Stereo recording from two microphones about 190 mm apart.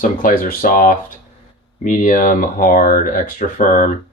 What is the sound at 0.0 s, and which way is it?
Speech, 45° left (ahead or behind).